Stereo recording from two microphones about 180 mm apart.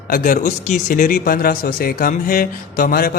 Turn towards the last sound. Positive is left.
turn(degrees=55)  # may be behind; listen again after turning